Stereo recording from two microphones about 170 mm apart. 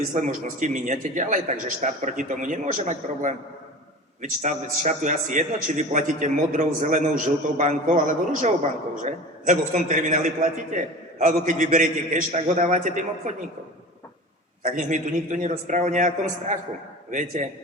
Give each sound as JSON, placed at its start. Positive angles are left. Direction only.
{"t": 0.1, "sound": "a man's voice", "side_deg": -50}
{"t": 14.6, "sound": "a man's voice", "side_deg": -50}